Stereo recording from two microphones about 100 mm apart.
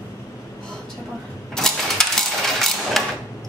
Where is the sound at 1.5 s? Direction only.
5° left (ahead or behind).